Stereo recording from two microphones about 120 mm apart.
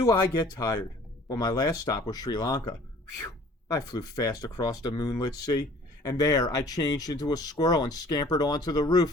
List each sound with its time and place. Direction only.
0.0 s speech: 35° left (ahead or behind)
3.7 s speech: 30° left (ahead or behind)